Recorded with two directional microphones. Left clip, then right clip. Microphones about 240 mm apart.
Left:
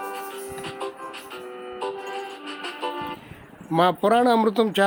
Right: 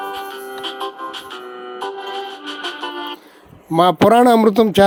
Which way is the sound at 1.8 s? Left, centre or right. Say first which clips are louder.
Right 5 dB; centre.